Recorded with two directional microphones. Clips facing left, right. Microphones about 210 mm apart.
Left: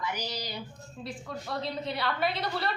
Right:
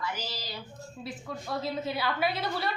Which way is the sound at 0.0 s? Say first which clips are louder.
Left 2 dB; 15° left (ahead or behind).